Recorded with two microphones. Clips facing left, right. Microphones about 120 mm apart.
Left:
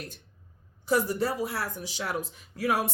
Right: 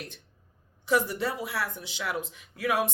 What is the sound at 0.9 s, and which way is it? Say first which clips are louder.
Speech: left 1 dB; 40° left (ahead or behind).